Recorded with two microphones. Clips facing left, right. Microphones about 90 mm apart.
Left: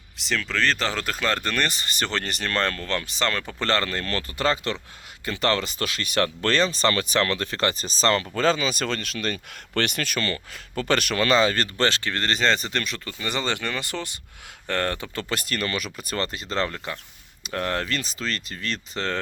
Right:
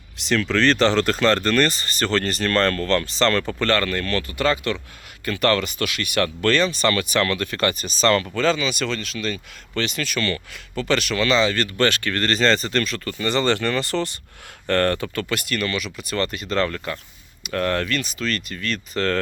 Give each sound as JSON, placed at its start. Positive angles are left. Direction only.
{"t": 0.2, "sound": "speech", "side_deg": 0}
{"t": 3.6, "sound": "speech", "side_deg": 25}
{"t": 8.4, "sound": "speech", "side_deg": 35}
{"t": 11.9, "sound": "speech", "side_deg": 25}
{"t": 15.1, "sound": "speech", "side_deg": 30}